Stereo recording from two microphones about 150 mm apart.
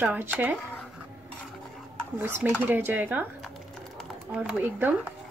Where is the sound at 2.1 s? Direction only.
15° right (ahead or behind).